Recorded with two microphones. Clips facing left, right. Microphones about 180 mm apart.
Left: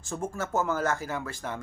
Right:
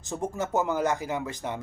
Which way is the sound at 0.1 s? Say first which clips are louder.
Right 2 dB; 15° right (ahead or behind).